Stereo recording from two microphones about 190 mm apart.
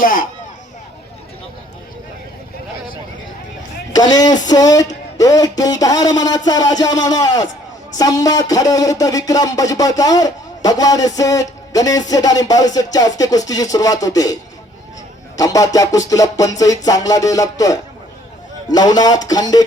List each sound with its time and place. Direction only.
0.0 s speech: 45° left (ahead or behind)
3.9 s speech: 20° left (ahead or behind)
15.4 s speech: 20° left (ahead or behind)